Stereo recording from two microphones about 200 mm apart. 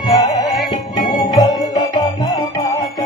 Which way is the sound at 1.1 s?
20° left (ahead or behind).